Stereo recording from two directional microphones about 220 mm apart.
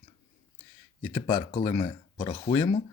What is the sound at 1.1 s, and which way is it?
Speech, 20° left (ahead or behind).